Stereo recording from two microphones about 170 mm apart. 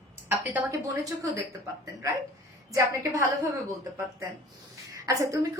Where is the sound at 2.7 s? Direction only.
20° right (ahead or behind).